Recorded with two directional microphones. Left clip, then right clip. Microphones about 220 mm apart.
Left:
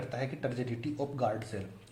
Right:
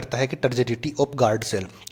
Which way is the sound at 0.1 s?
40° right (ahead or behind).